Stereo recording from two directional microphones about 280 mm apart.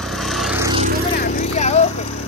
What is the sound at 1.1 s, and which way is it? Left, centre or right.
Vehicle, left.